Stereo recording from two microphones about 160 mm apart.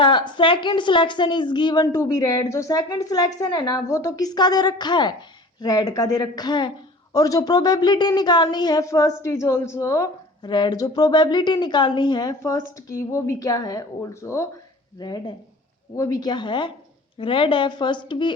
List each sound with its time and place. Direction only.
0.0 s a woman's voice: 30° left (ahead or behind)